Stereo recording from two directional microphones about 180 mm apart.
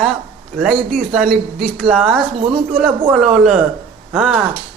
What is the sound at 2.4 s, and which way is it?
Speech, 30° right (ahead or behind).